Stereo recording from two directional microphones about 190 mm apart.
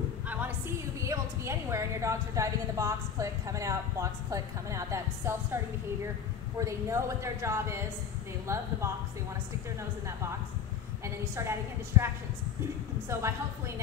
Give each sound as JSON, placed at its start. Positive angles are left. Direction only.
{"t": 0.3, "sound": "a woman's voice", "side_deg": -10}
{"t": 6.6, "sound": "speech", "side_deg": -15}
{"t": 11.9, "sound": "speech", "side_deg": -15}
{"t": 13.1, "sound": "speech", "side_deg": -15}